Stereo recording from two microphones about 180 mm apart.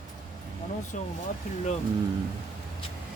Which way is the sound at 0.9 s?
45° left (ahead or behind).